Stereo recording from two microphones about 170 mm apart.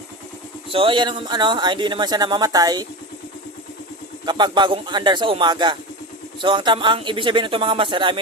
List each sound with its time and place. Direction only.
0.7 s speech: 30° right (ahead or behind)
4.3 s speech: 25° right (ahead or behind)